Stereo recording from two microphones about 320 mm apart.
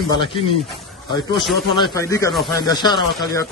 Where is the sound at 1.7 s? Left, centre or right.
Centre.